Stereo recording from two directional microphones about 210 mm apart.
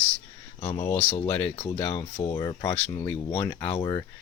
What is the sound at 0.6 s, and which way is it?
Speech, 30° left (ahead or behind).